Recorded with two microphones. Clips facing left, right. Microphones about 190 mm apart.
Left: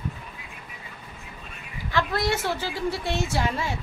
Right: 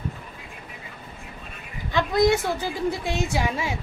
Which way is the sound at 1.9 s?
20° right (ahead or behind).